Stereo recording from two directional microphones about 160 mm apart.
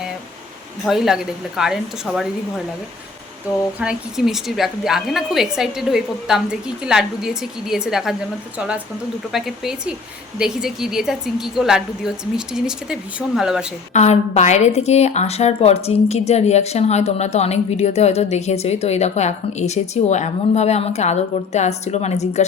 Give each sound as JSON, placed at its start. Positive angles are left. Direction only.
{"t": 0.9, "sound": "a woman's voice", "side_deg": 0}
{"t": 3.8, "sound": "a woman's voice", "side_deg": -5}
{"t": 13.9, "sound": "a woman's voice", "side_deg": 45}